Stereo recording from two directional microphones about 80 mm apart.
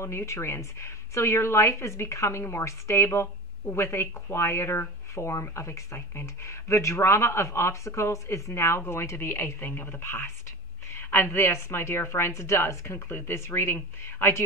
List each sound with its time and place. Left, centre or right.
0.0 s speech: left